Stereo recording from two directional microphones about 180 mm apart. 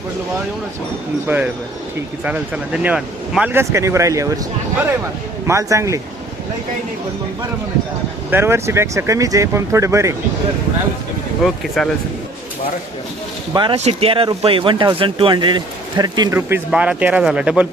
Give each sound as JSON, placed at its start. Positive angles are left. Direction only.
{"t": 1.3, "sound": "speech", "side_deg": -10}
{"t": 5.5, "sound": "speech", "side_deg": -15}
{"t": 8.3, "sound": "speech", "side_deg": -15}
{"t": 11.4, "sound": "speech", "side_deg": 0}
{"t": 13.5, "sound": "speech", "side_deg": -25}